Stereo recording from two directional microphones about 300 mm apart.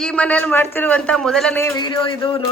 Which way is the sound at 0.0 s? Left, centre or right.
Centre.